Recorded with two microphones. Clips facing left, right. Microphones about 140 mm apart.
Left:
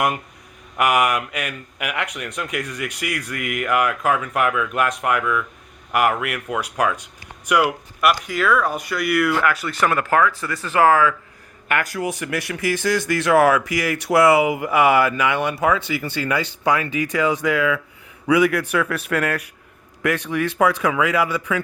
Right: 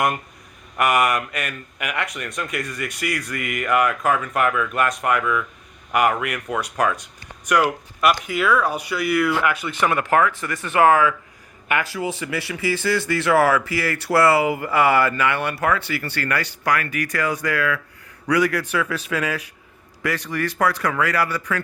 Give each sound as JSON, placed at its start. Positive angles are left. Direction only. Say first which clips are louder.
{"t": 0.8, "sound": "speech", "louder": "left 1 dB", "side_deg": 10}
{"t": 9.9, "sound": "speech", "louder": "even", "side_deg": -25}
{"t": 11.7, "sound": "speech", "louder": "left 1 dB", "side_deg": -10}
{"t": 12.6, "sound": "speech", "louder": "left 1 dB", "side_deg": 15}
{"t": 18.8, "sound": "speech", "louder": "left 2 dB", "side_deg": 0}
{"t": 20.1, "sound": "speech", "louder": "left 3 dB", "side_deg": 20}